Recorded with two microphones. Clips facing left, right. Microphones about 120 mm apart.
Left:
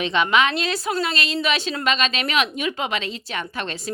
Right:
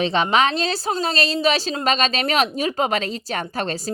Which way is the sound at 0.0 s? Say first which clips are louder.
Right 1 dB; 35° right (ahead or behind).